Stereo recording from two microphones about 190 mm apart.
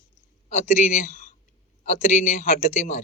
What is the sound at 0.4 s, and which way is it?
Speech, 40° left (ahead or behind).